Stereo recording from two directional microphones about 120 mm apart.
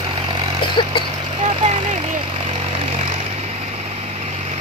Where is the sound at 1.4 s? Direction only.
70° right (ahead or behind).